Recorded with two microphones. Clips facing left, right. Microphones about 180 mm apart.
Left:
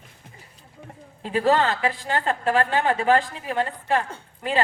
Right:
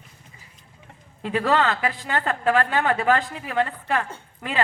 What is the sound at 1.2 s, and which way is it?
A woman's voice, 35° left (ahead or behind).